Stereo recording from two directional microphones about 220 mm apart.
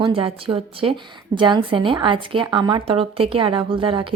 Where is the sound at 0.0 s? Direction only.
25° right (ahead or behind).